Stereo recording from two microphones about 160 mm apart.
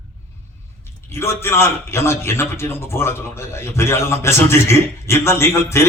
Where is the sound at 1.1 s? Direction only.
15° left (ahead or behind).